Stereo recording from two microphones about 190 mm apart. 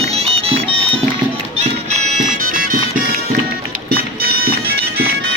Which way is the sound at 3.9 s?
55° right (ahead or behind).